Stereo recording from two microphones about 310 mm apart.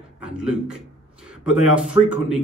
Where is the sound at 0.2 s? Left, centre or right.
Centre.